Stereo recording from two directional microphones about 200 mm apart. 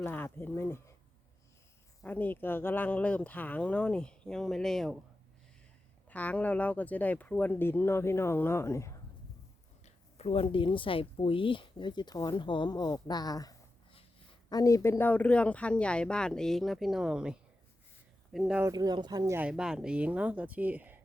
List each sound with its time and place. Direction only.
0.0 s speech: 10° left (ahead or behind)
2.0 s speech: 10° left (ahead or behind)
6.1 s speech: 5° left (ahead or behind)
9.8 s speech: 30° left (ahead or behind); by 18.6 s centre (ahead or behind)
18.6 s speech: 20° right (ahead or behind)